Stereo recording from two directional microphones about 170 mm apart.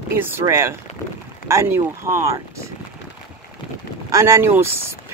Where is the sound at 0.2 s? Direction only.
15° right (ahead or behind).